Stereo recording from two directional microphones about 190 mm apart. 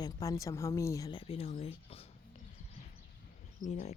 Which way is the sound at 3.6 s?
35° left (ahead or behind).